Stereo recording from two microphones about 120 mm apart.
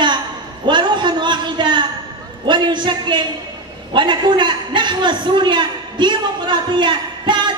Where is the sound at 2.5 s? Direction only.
40° right (ahead or behind).